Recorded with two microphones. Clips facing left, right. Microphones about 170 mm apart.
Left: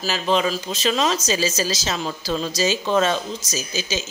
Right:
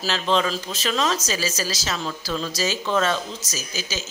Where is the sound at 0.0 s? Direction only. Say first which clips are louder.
Left 1 dB; 10° left (ahead or behind).